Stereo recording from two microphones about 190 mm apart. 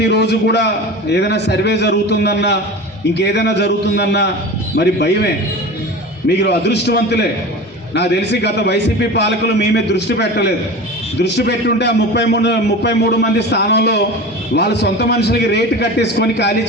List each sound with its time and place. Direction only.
0.0 s a man's voice: 60° left (ahead or behind)